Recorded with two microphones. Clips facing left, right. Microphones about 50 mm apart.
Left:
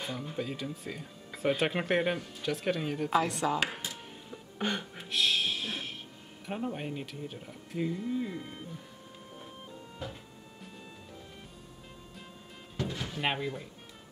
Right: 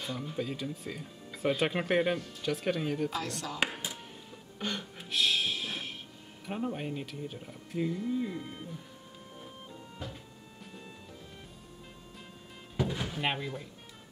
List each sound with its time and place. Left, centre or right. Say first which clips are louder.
0.0 s speech: even; centre
3.1 s speech: left 8 dB; left
4.6 s speech: left 3 dB; centre
4.9 s music: right 2 dB; centre
6.4 s speech: right 1 dB; centre
12.7 s music: right 3 dB; centre
13.2 s speech: left 3 dB; centre